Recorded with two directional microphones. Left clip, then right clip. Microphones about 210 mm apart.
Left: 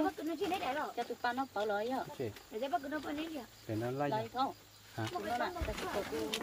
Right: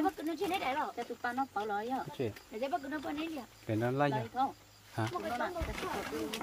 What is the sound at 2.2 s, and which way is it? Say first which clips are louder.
Speech: right 2 dB; 40° right (ahead or behind).